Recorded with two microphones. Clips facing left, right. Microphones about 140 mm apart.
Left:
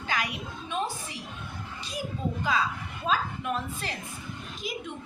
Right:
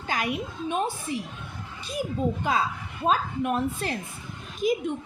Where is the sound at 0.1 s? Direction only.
50° right (ahead or behind).